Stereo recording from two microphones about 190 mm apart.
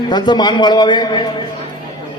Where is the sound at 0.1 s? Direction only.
20° left (ahead or behind).